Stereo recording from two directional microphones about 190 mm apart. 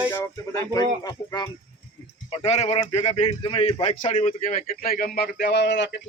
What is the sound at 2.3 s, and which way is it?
Speech, 30° left (ahead or behind).